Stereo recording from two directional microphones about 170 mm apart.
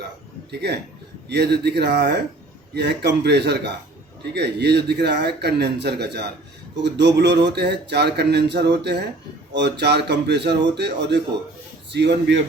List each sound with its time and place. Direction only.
0.5 s a man's voice: 75° right (ahead or behind)
6.8 s a man's voice: 90° right